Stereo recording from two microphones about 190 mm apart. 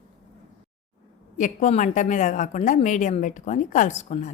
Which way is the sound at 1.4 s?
40° left (ahead or behind).